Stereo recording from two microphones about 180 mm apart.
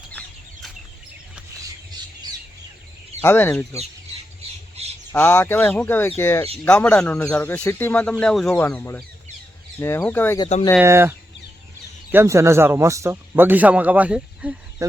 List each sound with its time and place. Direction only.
0.1 s chicken: 5° left (ahead or behind)
3.2 s speech: 10° left (ahead or behind)
4.8 s bird: 35° right (ahead or behind)
5.1 s speech: 10° left (ahead or behind)
10.8 s speech: 15° right (ahead or behind)
12.1 s speech: 15° right (ahead or behind)
14.8 s speech: 15° right (ahead or behind)